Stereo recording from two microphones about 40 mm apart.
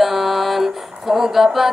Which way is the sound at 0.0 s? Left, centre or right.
Centre.